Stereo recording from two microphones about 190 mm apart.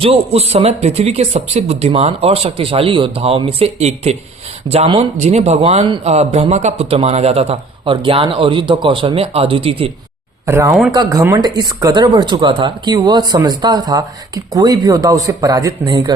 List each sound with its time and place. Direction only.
0.0 s a man's voice: 30° right (ahead or behind)
10.4 s speech: 15° right (ahead or behind)